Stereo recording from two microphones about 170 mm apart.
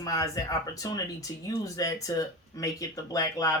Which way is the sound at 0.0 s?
20° left (ahead or behind).